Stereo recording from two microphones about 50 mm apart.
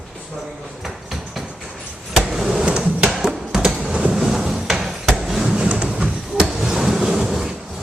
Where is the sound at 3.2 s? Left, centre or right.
Centre.